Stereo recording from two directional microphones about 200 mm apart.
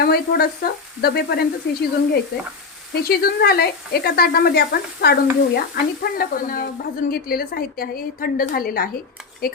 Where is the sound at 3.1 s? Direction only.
50° left (ahead or behind).